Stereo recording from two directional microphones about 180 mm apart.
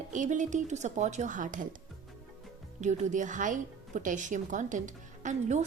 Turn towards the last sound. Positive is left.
turn(degrees=-40)  # may be behind; listen again after turning